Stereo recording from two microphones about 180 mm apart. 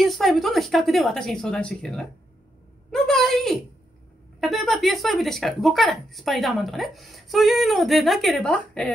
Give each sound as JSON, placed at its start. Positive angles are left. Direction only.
{"t": 0.0, "sound": "speech", "side_deg": 0}